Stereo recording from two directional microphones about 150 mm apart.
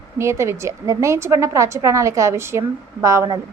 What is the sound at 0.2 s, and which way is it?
A woman's voice, 20° right (ahead or behind).